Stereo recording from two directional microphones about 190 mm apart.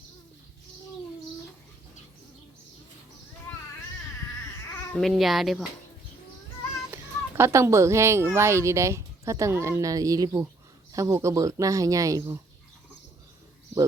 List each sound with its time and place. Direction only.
4.9 s speech: centre (ahead or behind)
6.9 s speech: 15° right (ahead or behind)